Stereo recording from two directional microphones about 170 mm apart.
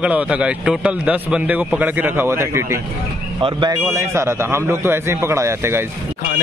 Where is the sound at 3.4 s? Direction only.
25° right (ahead or behind).